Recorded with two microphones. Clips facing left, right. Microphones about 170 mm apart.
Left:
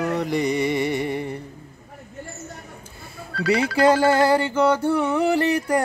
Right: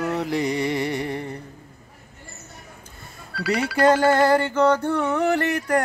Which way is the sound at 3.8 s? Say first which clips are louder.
Right 1 dB; 10° left (ahead or behind).